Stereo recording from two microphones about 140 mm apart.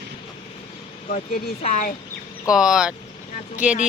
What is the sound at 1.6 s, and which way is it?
Speech, 60° left (ahead or behind).